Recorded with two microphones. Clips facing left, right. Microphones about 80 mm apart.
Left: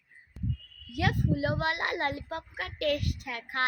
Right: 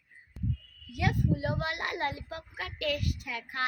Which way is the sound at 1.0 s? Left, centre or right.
Left.